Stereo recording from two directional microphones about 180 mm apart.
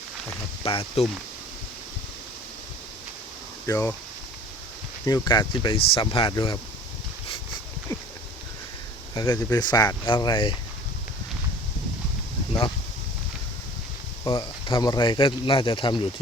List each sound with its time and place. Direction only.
0.6 s speech: 30° left (ahead or behind)
3.7 s speech: 15° left (ahead or behind)
5.0 s speech: 20° left (ahead or behind)
9.1 s speech: 20° left (ahead or behind)
14.3 s speech: 25° left (ahead or behind)